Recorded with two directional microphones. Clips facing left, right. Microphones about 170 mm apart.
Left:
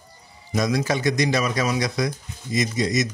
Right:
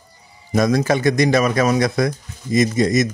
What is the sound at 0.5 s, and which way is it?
Speech, 50° right (ahead or behind).